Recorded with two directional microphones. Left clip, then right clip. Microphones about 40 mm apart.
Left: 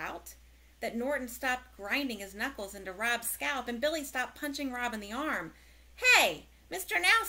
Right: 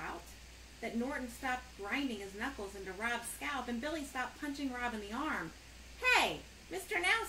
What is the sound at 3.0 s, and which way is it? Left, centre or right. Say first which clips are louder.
A woman's voice: left 7 dB; left.